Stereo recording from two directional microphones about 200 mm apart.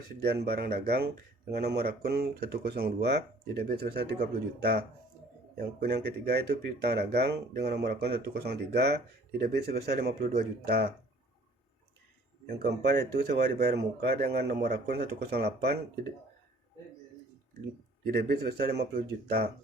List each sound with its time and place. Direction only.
0.2 s speech: 50° right (ahead or behind)
12.8 s speech: 55° right (ahead or behind)
18.0 s speech: 50° right (ahead or behind)